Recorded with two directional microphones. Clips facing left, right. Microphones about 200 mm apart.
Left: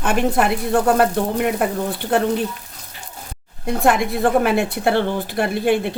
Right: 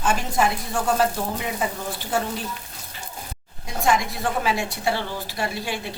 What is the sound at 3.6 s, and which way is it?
Speech, 60° left (ahead or behind).